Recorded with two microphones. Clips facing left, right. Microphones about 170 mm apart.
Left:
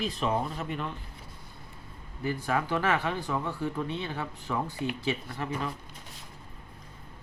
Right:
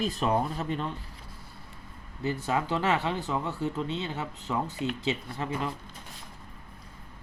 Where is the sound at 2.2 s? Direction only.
20° right (ahead or behind).